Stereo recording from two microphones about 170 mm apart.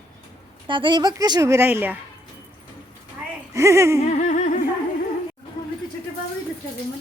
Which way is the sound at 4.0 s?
45° left (ahead or behind).